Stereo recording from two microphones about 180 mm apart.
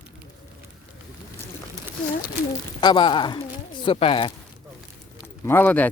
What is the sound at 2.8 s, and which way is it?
Speech, 25° left (ahead or behind).